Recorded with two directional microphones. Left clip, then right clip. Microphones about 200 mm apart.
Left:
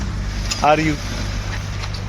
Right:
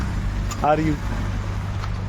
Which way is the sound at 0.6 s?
10° left (ahead or behind).